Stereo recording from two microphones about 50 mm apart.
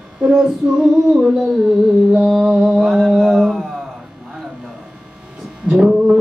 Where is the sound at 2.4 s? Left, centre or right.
Centre.